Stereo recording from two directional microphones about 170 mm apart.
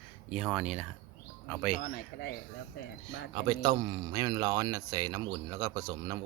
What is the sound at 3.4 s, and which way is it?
Speech, 25° right (ahead or behind).